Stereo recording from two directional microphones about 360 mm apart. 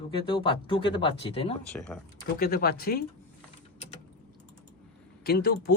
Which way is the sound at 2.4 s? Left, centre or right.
Left.